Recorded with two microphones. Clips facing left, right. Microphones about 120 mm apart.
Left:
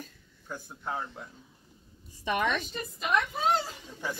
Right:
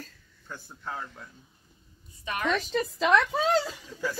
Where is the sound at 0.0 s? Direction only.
15° left (ahead or behind).